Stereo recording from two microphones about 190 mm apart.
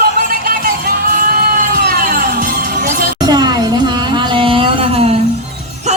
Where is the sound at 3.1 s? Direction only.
20° right (ahead or behind).